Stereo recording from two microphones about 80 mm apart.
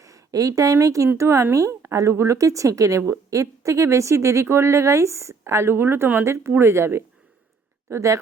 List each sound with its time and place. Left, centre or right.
0.3 s speech: right